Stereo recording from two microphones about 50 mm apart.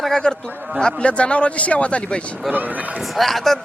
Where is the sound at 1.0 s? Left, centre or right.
Left.